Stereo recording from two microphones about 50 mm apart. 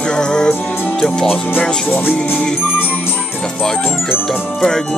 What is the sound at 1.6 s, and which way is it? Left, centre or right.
Music, centre.